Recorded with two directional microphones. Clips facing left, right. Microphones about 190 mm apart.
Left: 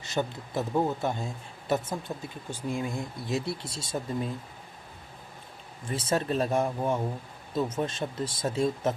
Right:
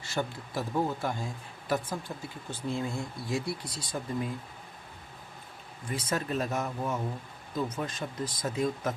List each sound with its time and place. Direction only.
0.0 s speech: 20° left (ahead or behind)
5.9 s speech: 25° left (ahead or behind)